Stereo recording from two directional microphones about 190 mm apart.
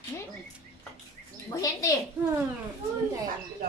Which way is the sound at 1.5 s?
15° left (ahead or behind).